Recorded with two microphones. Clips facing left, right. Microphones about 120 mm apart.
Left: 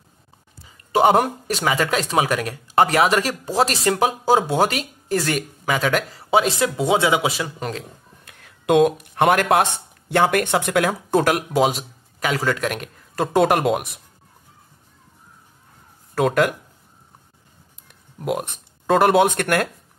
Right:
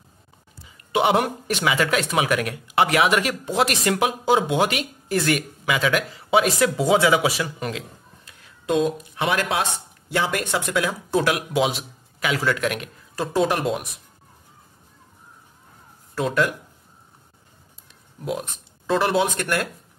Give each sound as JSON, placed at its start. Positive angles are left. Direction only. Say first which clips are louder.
{"t": 0.7, "sound": "speech", "louder": "left 4 dB", "side_deg": 40}
{"t": 8.3, "sound": "speech", "louder": "left 5 dB", "side_deg": 60}
{"t": 16.2, "sound": "speech", "louder": "left 4 dB", "side_deg": 55}
{"t": 17.8, "sound": "a sound", "louder": "left 4 dB", "side_deg": 55}
{"t": 18.9, "sound": "speech", "louder": "left 5 dB", "side_deg": 50}